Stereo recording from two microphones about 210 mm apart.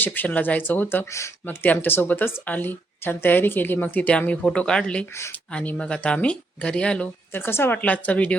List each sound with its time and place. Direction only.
0.0 s speech: 10° left (ahead or behind)